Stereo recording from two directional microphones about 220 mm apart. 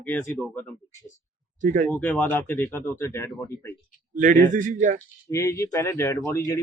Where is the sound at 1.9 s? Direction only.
5° left (ahead or behind).